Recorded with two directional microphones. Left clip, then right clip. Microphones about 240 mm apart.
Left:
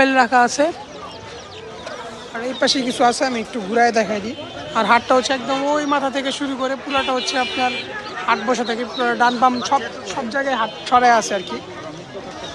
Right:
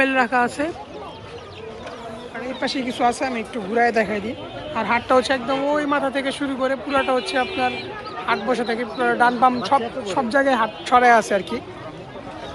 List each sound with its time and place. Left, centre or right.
0.0 s speech: centre
2.3 s speech: left
5.1 s speech: centre